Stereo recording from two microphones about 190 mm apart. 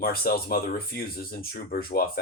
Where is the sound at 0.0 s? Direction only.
50° left (ahead or behind).